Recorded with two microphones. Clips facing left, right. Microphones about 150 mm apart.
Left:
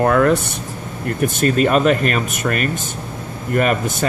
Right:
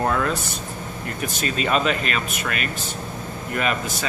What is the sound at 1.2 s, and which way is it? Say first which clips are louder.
Speech: left 10 dB; 50° left (ahead or behind).